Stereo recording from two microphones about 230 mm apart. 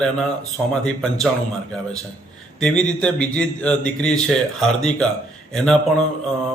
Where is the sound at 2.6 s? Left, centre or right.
Centre.